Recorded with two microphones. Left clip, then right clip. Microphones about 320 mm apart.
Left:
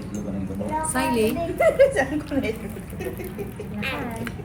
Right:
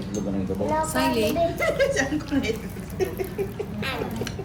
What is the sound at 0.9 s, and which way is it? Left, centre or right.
Speech, centre.